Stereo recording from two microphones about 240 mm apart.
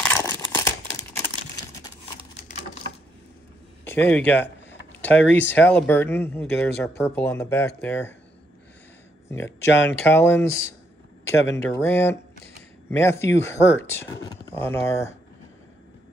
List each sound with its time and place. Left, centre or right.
0.0 s crumpling: centre
3.8 s a sound: centre
5.2 s speech: left
5.5 s speech: centre
9.3 s speech: centre